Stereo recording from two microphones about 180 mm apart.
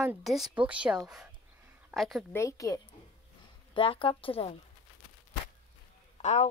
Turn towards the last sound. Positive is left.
turn(degrees=40)  # may be behind; listen again after turning